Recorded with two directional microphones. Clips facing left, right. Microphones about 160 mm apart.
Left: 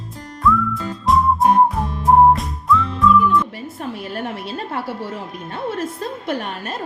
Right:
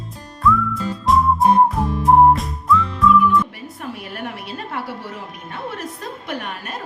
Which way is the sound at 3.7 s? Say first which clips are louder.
Left 3 dB; 30° left (ahead or behind).